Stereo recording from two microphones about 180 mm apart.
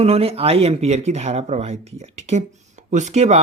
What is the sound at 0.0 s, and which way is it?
Speech, 35° right (ahead or behind).